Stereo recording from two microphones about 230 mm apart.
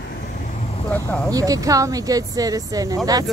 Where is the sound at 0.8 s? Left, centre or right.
Centre.